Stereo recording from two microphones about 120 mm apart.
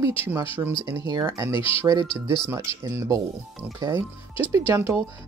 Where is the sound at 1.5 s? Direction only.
50° left (ahead or behind).